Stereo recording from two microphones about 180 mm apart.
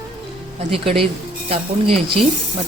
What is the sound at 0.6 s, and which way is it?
Speech, 30° right (ahead or behind).